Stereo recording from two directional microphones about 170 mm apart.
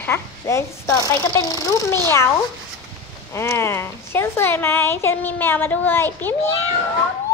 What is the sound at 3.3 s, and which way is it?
Speech, 15° left (ahead or behind).